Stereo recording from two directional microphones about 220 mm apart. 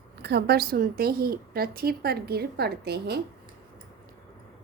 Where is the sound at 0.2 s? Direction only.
50° right (ahead or behind).